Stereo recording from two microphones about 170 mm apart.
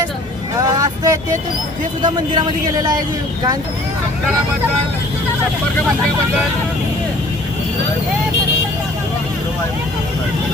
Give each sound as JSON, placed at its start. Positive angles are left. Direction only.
{"t": 0.8, "sound": "vehicle", "side_deg": -20}
{"t": 2.0, "sound": "a man's voice", "side_deg": -25}